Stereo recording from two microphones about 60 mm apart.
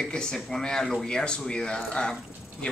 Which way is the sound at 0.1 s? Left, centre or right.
Centre.